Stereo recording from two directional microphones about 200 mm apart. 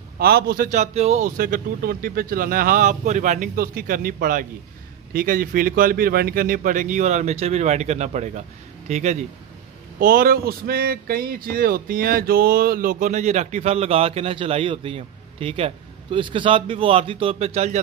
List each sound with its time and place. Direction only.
0.2 s a man's voice: 50° right (ahead or behind); by 9.2 s 35° right (ahead or behind)
9.9 s speech: 45° right (ahead or behind)